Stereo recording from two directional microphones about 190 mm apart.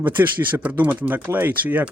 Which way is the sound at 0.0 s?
10° right (ahead or behind).